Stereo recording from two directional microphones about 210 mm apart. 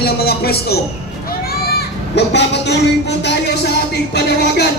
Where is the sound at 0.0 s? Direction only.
50° left (ahead or behind).